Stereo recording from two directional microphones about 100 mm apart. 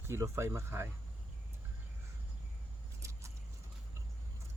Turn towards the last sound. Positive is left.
turn(degrees=-30)  # may be behind; listen again after turning